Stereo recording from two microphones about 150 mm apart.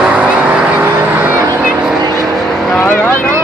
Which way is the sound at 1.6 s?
5° right (ahead or behind).